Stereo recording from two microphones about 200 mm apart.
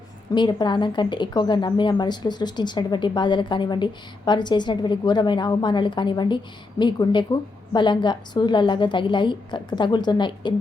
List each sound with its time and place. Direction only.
0.3 s a woman's voice: 20° left (ahead or behind)